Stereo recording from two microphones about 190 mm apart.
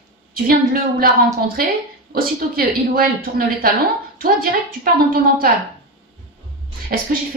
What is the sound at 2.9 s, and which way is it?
Speech, 50° right (ahead or behind).